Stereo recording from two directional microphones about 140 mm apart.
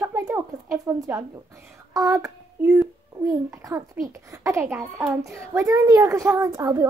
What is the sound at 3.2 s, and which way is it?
A child's voice, 25° right (ahead or behind).